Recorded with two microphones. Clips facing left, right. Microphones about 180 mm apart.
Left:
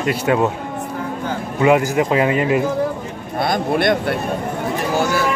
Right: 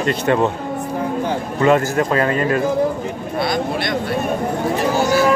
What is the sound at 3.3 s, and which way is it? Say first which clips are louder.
Speech: left 3 dB; 50° left (ahead or behind).